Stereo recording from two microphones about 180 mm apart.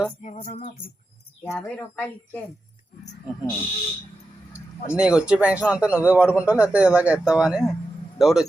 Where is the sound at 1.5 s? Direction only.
10° left (ahead or behind).